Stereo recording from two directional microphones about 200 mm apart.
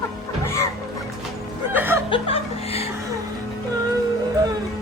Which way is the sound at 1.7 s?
10° right (ahead or behind).